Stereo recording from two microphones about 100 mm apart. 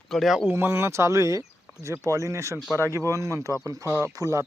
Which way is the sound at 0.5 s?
25° right (ahead or behind).